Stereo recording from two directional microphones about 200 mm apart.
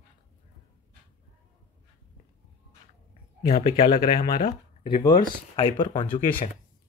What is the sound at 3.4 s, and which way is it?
Speech, 40° left (ahead or behind).